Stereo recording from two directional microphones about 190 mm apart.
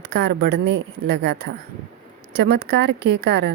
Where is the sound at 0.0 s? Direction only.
60° right (ahead or behind).